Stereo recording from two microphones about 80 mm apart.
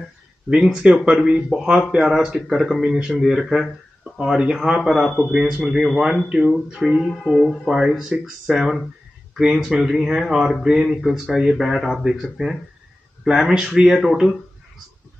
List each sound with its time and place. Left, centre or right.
0.5 s speech: centre
6.8 s speech: centre